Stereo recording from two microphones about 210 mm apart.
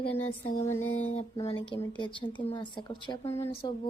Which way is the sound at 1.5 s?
25° left (ahead or behind).